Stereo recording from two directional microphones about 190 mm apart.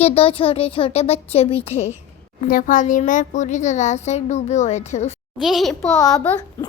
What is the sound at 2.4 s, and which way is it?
A child's voice, 45° left (ahead or behind).